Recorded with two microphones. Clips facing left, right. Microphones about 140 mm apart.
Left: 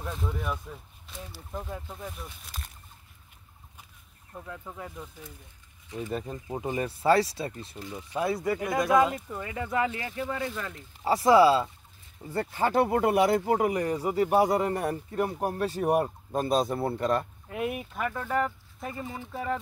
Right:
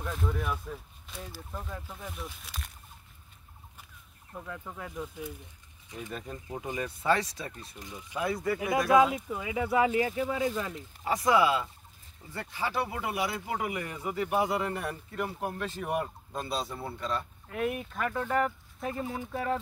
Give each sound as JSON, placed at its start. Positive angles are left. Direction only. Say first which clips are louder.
{"t": 0.0, "sound": "speech", "louder": "even", "side_deg": 0}
{"t": 2.0, "sound": "speech", "louder": "left 1 dB", "side_deg": 0}
{"t": 4.5, "sound": "speech", "louder": "left 1 dB", "side_deg": 5}
{"t": 6.0, "sound": "speech", "louder": "left 6 dB", "side_deg": 25}
{"t": 8.5, "sound": "speech", "louder": "right 1 dB", "side_deg": -5}
{"t": 11.1, "sound": "speech", "louder": "left 6 dB", "side_deg": 30}
{"t": 12.4, "sound": "speech", "louder": "left 8 dB", "side_deg": 50}
{"t": 17.5, "sound": "speech", "louder": "right 3 dB", "side_deg": 15}
{"t": 18.1, "sound": "speech", "louder": "right 1 dB", "side_deg": 0}